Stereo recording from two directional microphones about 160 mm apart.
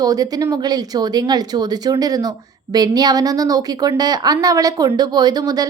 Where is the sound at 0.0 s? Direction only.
25° right (ahead or behind).